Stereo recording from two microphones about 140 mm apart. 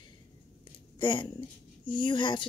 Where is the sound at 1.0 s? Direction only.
35° left (ahead or behind).